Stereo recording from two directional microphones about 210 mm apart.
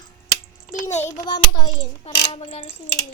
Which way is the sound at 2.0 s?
25° left (ahead or behind).